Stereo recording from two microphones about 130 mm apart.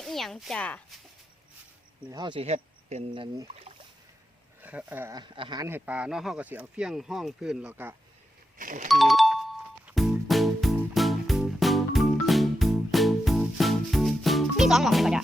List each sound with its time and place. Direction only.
0.0 s speech: centre (ahead or behind)
2.0 s speech: 35° right (ahead or behind)
2.4 s speech: 55° right (ahead or behind)
3.1 s speech: 40° right (ahead or behind)
4.6 s speech: 10° right (ahead or behind)
5.1 s speech: 35° right (ahead or behind)
5.6 s speech: 15° right (ahead or behind)
8.5 s doorbell: 85° right
8.9 s music: centre (ahead or behind)